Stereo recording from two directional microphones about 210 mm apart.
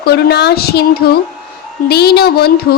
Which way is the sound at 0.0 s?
50° left (ahead or behind).